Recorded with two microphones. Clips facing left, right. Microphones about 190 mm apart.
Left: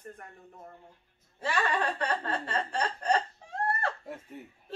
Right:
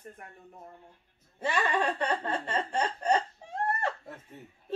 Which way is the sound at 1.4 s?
20° right (ahead or behind).